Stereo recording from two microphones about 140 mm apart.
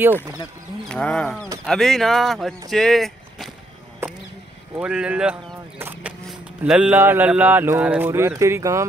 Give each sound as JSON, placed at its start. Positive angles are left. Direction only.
{"t": 0.8, "sound": "speech", "side_deg": 5}
{"t": 4.7, "sound": "vehicle", "side_deg": -5}
{"t": 6.6, "sound": "speech", "side_deg": -10}